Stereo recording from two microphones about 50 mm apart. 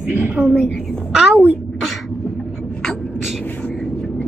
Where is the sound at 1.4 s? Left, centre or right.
Centre.